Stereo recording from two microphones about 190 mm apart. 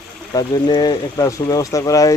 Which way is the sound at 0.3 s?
25° left (ahead or behind).